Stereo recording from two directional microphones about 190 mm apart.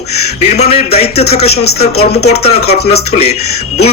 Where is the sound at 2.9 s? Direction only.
35° left (ahead or behind).